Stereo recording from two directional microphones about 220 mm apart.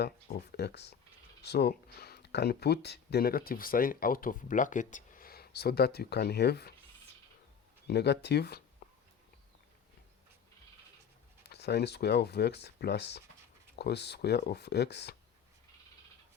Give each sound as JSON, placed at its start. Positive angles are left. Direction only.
{"t": 0.0, "sound": "speech", "side_deg": 45}
{"t": 7.9, "sound": "speech", "side_deg": 50}
{"t": 11.4, "sound": "speech", "side_deg": 50}